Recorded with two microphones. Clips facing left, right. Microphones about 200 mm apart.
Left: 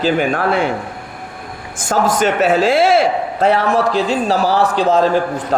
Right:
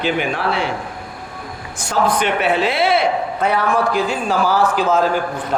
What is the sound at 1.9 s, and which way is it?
A man's voice, 45° left (ahead or behind).